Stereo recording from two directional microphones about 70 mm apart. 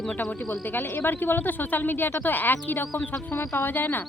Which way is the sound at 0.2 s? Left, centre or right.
Left.